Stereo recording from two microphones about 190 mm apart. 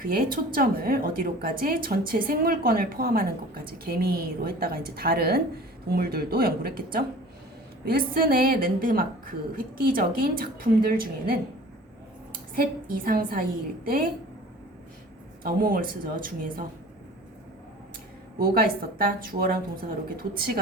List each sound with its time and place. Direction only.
0.0 s a woman's voice: 50° right (ahead or behind)
15.4 s a woman's voice: 50° right (ahead or behind)
18.3 s a woman's voice: 50° right (ahead or behind)